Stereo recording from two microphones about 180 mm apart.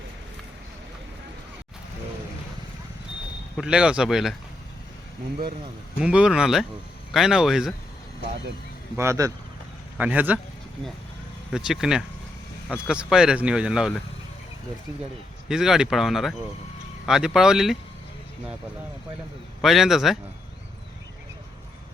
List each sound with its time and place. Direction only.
3.6 s speech: 5° right (ahead or behind)
6.0 s speech: 5° right (ahead or behind)
9.0 s speech: 15° right (ahead or behind)
11.5 s speech: 5° right (ahead or behind)
15.4 s speech: 5° right (ahead or behind)
19.6 s speech: centre (ahead or behind)